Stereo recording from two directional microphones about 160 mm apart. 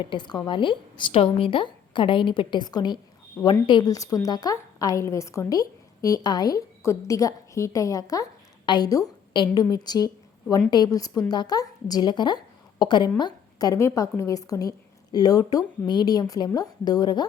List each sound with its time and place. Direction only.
0.0 s a woman's voice: 30° left (ahead or behind)